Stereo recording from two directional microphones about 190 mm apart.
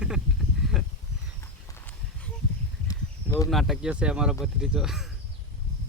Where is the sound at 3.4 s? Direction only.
Centre (ahead or behind).